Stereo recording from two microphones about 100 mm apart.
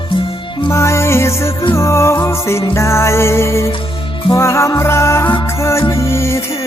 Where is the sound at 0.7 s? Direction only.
25° left (ahead or behind).